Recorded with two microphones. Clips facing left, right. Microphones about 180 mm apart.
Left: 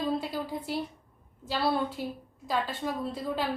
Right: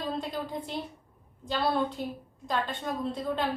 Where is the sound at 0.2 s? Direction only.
5° left (ahead or behind).